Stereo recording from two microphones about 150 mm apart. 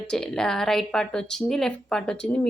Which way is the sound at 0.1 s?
5° left (ahead or behind).